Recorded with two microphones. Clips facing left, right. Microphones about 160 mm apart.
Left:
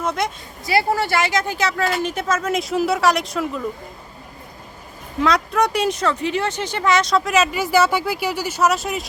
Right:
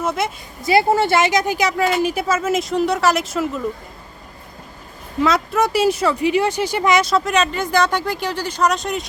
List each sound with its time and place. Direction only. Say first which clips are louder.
0.0 s speech: right 1 dB; 5° right (ahead or behind)
0.6 s speech: right 4 dB; 20° right (ahead or behind); by 3.6 s centre (ahead or behind)
5.2 s speech: right 1 dB; 5° right (ahead or behind)